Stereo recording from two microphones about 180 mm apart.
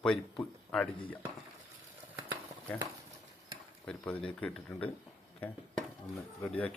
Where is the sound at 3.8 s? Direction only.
10° left (ahead or behind).